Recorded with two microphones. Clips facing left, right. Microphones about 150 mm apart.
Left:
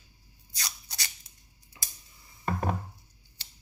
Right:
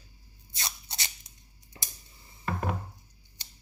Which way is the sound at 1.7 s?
35° right (ahead or behind).